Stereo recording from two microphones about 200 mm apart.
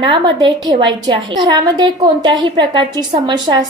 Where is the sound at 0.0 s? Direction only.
25° right (ahead or behind).